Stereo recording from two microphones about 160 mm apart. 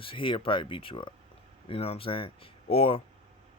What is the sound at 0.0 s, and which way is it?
Speech, 30° left (ahead or behind).